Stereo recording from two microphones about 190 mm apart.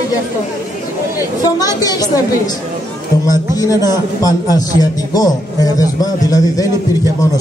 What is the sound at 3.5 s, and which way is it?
A man's voice, 20° left (ahead or behind).